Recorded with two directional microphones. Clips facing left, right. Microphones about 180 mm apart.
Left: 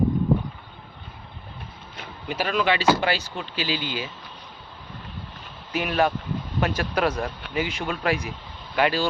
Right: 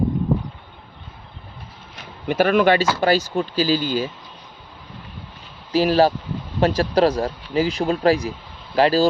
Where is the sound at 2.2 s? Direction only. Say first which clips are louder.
Right 8 dB; 55° right (ahead or behind).